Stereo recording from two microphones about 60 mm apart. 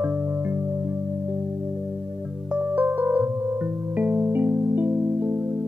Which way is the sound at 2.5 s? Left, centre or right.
Right.